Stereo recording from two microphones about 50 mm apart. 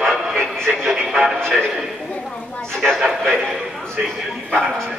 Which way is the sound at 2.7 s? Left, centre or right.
Centre.